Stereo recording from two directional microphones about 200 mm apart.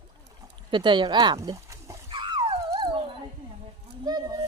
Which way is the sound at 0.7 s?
25° right (ahead or behind).